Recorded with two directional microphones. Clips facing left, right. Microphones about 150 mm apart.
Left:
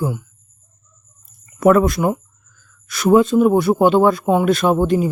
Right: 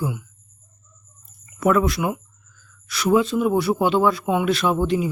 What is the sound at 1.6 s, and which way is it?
A man's voice, 50° left (ahead or behind).